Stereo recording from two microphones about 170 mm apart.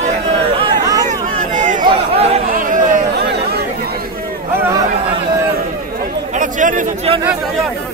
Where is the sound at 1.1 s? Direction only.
45° right (ahead or behind).